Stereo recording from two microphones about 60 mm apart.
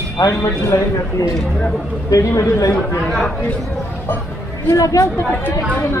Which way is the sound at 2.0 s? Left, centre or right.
Left.